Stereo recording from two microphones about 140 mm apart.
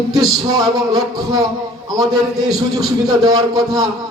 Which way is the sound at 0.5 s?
25° right (ahead or behind).